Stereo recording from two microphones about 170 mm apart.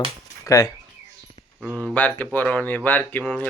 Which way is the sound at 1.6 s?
Centre (ahead or behind).